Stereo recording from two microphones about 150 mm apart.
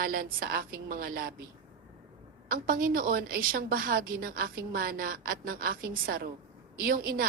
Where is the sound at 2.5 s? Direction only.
70° right (ahead or behind).